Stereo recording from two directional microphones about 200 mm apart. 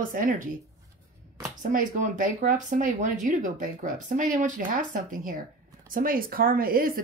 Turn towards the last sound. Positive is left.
turn(degrees=-45)  # may be behind; listen again after turning